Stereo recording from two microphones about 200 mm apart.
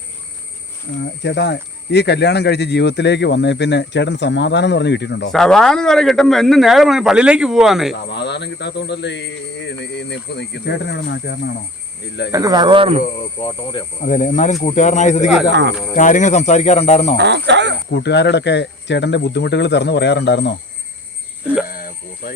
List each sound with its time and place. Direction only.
1.0 s speech: 60° left (ahead or behind)
5.3 s speech: centre (ahead or behind)
8.1 s speech: 60° left (ahead or behind)
12.3 s speech: 20° right (ahead or behind)
13.4 s speech: 25° left (ahead or behind)
14.0 s speech: 40° left (ahead or behind)
17.2 s speech: 60° right (ahead or behind)
17.9 s speech: 60° left (ahead or behind)
21.7 s a sound: 45° left (ahead or behind)